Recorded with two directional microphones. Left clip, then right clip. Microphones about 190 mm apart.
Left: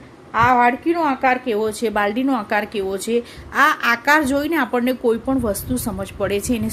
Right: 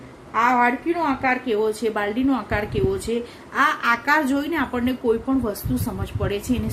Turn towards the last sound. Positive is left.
turn(degrees=50)  # may be behind; listen again after turning